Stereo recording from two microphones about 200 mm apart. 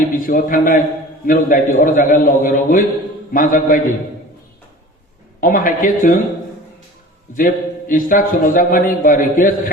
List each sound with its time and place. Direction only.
0.3 s a man's voice: 45° left (ahead or behind)
5.4 s a man's voice: 45° left (ahead or behind)
7.3 s a man's voice: 45° left (ahead or behind)